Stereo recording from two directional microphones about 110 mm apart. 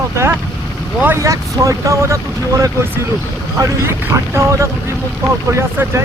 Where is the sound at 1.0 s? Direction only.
25° right (ahead or behind).